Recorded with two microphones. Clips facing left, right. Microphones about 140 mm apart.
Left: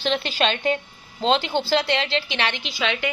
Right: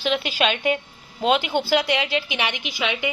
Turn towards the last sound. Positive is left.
turn(degrees=-15)  # may be behind; listen again after turning